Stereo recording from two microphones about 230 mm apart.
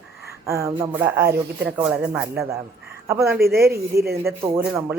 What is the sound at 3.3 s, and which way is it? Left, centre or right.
Speech, right.